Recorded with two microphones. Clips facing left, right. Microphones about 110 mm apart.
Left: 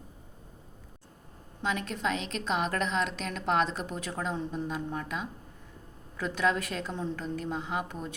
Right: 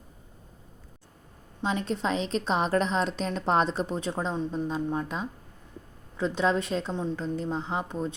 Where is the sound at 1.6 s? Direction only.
30° right (ahead or behind).